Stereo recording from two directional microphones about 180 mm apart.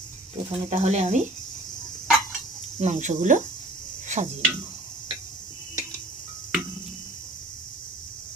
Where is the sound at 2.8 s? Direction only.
40° right (ahead or behind).